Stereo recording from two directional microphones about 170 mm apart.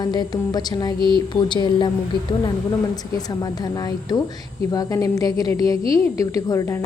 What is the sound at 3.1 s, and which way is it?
A woman's voice, 20° left (ahead or behind).